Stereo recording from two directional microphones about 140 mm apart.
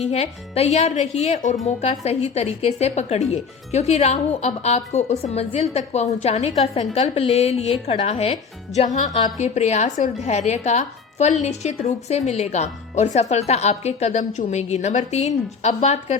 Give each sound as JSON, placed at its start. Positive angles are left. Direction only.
{"t": 0.0, "sound": "a woman's voice", "side_deg": 50}